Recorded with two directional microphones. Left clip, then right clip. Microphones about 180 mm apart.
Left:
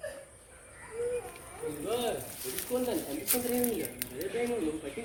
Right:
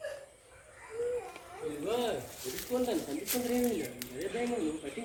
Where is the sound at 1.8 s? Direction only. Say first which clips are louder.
Even; 35° right (ahead or behind).